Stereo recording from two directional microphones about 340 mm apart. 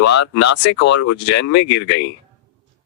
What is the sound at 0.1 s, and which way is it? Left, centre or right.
Speech, left.